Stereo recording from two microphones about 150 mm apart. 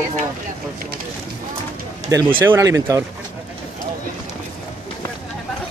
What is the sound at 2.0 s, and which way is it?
Speech, 20° right (ahead or behind).